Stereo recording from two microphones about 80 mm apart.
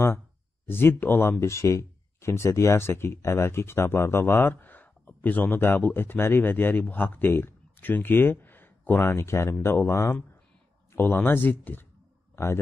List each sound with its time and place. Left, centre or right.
0.7 s speech: left
1.4 s speech: left